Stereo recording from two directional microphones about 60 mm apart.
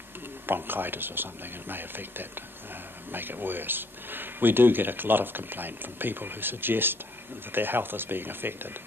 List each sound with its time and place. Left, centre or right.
0.5 s speech: right